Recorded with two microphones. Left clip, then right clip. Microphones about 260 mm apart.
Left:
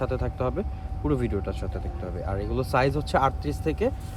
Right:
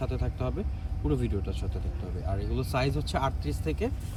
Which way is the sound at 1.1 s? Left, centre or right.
Left.